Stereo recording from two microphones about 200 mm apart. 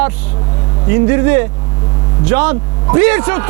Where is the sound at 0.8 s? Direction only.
20° right (ahead or behind).